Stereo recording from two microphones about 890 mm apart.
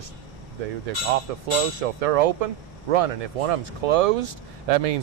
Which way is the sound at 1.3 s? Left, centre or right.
Right.